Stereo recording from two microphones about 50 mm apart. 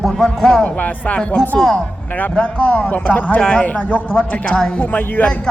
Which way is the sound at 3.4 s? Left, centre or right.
Left.